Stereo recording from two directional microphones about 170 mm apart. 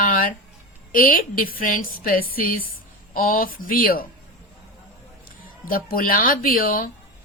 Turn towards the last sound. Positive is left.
turn(degrees=55)  # may be behind; listen again after turning